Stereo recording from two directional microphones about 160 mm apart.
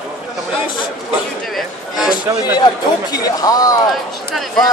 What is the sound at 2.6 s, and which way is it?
A man's voice, 25° left (ahead or behind).